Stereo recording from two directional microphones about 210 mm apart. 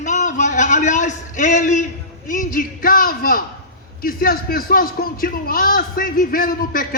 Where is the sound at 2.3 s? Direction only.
40° left (ahead or behind).